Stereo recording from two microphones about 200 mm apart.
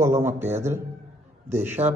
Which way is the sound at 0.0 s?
15° right (ahead or behind).